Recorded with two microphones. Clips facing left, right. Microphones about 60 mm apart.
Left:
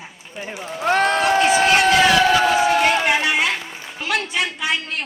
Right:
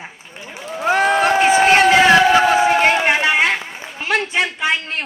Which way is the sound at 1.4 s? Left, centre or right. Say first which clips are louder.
Right 4 dB; right.